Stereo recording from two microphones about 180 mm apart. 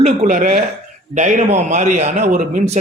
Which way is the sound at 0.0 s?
35° right (ahead or behind).